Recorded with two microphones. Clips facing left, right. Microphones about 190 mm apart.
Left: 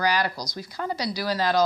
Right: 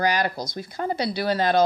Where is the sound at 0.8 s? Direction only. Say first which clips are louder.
Right 3 dB; 35° right (ahead or behind).